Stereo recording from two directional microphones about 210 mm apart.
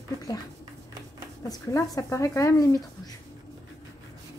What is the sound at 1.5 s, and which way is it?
Speech, 15° left (ahead or behind).